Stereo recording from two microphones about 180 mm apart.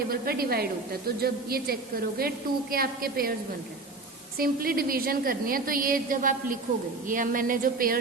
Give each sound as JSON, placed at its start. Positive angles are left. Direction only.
{"t": 0.1, "sound": "a woman's voice", "side_deg": -55}
{"t": 4.4, "sound": "a woman's voice", "side_deg": -55}